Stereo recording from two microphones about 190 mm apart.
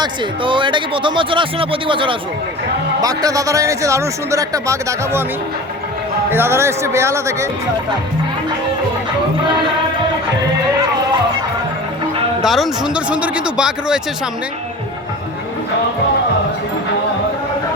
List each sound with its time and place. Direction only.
0.0 s speech: 25° right (ahead or behind)
6.3 s speech: 15° right (ahead or behind)
12.4 s speech: centre (ahead or behind)